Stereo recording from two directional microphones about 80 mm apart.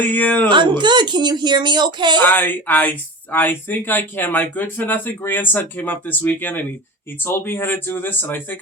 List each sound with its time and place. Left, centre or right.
0.0 s speech: left
0.4 s speech: right
2.2 s speech: left